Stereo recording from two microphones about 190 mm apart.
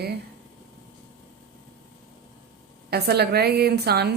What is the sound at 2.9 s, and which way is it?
A woman's voice, 60° right (ahead or behind).